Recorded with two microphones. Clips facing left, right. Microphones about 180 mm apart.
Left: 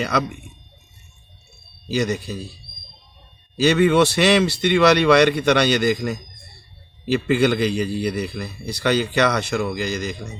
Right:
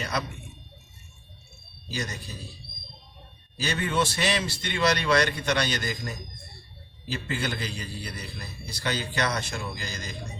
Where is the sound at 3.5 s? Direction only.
75° left (ahead or behind).